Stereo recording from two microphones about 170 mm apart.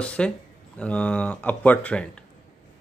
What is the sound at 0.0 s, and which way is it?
Speech, 5° left (ahead or behind).